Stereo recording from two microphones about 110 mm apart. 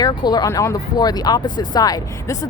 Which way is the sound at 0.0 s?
40° left (ahead or behind).